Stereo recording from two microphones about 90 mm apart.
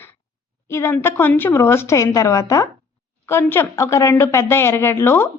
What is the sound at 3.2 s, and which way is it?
Speech, 25° left (ahead or behind).